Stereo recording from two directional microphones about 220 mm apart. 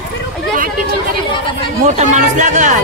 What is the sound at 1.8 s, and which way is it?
Speech, 35° right (ahead or behind).